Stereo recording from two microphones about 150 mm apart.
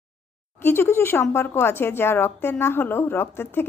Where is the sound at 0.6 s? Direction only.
15° left (ahead or behind).